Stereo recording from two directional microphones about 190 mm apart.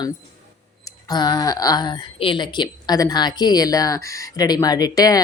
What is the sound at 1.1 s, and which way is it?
A woman's voice, 20° left (ahead or behind).